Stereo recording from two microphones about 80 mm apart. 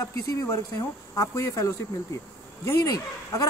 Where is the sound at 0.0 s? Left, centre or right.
Left.